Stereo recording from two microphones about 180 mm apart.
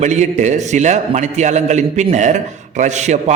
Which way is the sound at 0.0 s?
40° right (ahead or behind).